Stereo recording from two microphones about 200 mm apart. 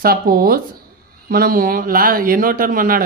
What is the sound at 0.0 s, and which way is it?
A man's voice, 45° right (ahead or behind).